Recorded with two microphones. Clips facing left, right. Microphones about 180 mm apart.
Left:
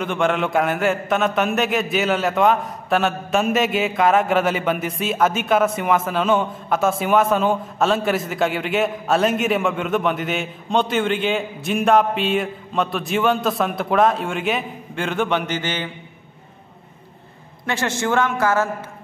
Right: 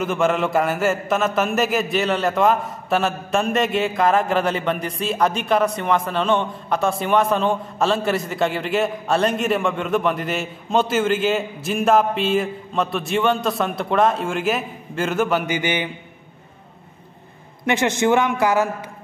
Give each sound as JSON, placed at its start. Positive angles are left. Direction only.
{"t": 0.0, "sound": "a man's voice", "side_deg": 0}
{"t": 17.6, "sound": "a man's voice", "side_deg": -20}